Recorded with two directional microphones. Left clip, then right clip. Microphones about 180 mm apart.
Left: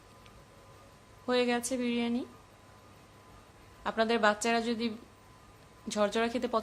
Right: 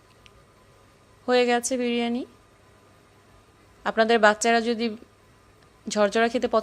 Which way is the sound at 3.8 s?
35° right (ahead or behind).